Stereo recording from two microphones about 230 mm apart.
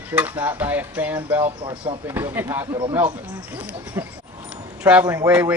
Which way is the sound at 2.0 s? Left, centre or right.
Centre.